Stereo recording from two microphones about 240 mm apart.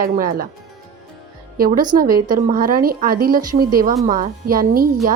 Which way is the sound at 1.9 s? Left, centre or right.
Right.